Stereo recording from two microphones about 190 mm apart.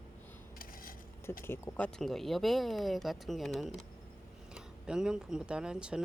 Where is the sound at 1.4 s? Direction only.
10° left (ahead or behind).